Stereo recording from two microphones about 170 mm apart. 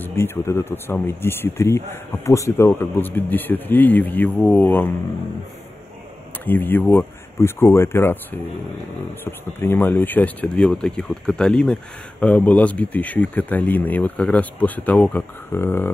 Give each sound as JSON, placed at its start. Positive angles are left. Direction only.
{"t": 0.0, "sound": "speech", "side_deg": 15}
{"t": 6.4, "sound": "speech", "side_deg": 10}